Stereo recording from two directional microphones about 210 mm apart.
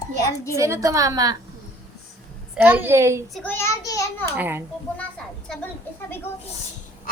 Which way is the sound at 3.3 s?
10° left (ahead or behind).